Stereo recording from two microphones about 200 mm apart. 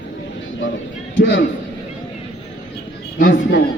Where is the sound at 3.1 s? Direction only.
60° left (ahead or behind).